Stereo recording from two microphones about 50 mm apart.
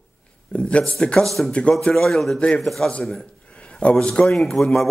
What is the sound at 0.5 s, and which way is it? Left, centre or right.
Speech, left.